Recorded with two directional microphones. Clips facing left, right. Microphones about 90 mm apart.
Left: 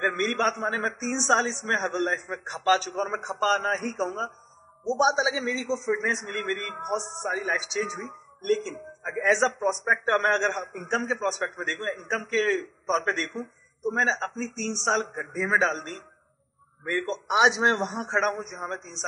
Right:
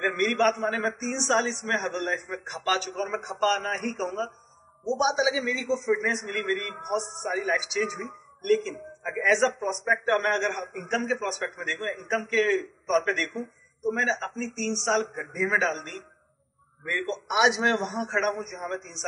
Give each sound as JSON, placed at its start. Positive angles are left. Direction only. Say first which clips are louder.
{"t": 0.0, "sound": "a man's voice", "louder": "right 2 dB", "side_deg": 35}